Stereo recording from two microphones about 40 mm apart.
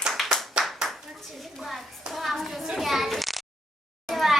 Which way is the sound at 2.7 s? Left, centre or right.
Centre.